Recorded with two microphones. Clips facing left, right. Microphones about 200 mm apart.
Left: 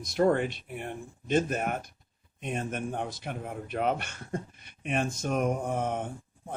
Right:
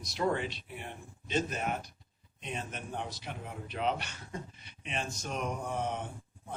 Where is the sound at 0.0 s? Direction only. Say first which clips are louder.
Left 7 dB; 50° left (ahead or behind).